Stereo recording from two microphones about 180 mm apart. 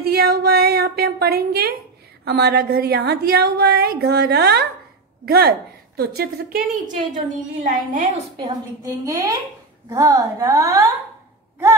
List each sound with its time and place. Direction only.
0.0 s a woman's voice: 60° right (ahead or behind)
7.6 s a woman's voice: 45° right (ahead or behind)
8.4 s a woman's voice: 20° right (ahead or behind)